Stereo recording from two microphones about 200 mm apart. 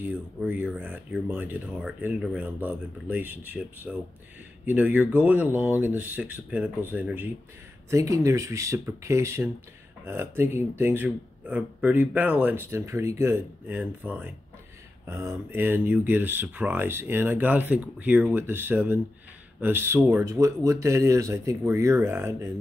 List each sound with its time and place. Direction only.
0.1 s speech: 10° right (ahead or behind)